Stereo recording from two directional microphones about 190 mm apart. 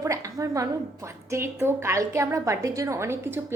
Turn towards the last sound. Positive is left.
turn(degrees=-10)  # may be behind; listen again after turning